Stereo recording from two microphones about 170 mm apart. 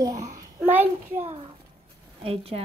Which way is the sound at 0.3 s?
15° right (ahead or behind).